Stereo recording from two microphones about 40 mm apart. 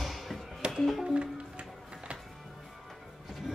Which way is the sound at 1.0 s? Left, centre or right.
Right.